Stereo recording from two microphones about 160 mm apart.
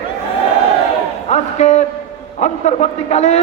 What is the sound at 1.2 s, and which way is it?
A man's voice, 45° left (ahead or behind).